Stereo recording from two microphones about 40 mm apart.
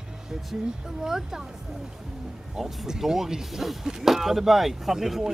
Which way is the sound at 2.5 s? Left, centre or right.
Centre.